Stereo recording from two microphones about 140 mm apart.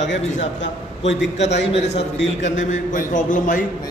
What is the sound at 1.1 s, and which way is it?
A man's voice, 50° left (ahead or behind).